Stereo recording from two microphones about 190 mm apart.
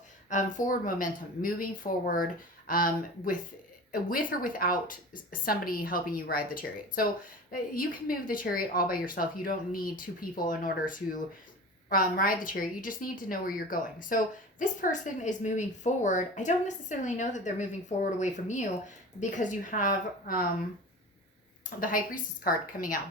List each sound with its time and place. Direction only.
0.3 s a woman's voice: 40° left (ahead or behind)
21.8 s a woman's voice: 45° left (ahead or behind)